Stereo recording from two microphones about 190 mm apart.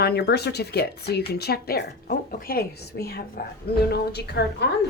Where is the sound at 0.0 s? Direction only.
55° left (ahead or behind).